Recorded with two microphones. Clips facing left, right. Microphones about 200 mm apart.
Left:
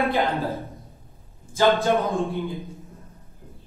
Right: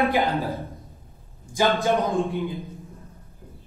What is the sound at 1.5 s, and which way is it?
Speech, 15° right (ahead or behind).